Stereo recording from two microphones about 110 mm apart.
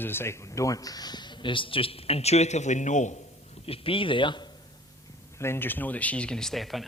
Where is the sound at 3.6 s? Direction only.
60° left (ahead or behind).